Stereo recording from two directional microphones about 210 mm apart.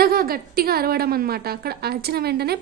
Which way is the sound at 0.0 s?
45° right (ahead or behind).